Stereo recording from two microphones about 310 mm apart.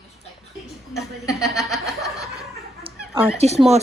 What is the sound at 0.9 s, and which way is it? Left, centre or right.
Speech, centre.